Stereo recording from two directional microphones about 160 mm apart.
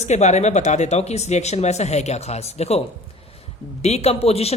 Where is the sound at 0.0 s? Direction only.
45° left (ahead or behind).